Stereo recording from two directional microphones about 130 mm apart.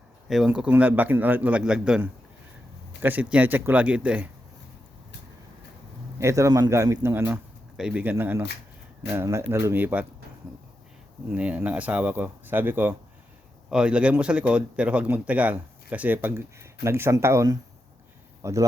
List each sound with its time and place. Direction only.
0.3 s speech: 5° right (ahead or behind)
6.1 s a man's voice: 20° right (ahead or behind)
7.8 s speech: 5° right (ahead or behind)
11.3 s a man's voice: 10° right (ahead or behind)